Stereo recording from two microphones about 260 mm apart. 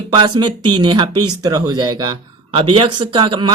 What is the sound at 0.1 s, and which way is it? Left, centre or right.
Speech, centre.